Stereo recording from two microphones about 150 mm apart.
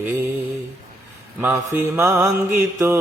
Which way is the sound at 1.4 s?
15° right (ahead or behind).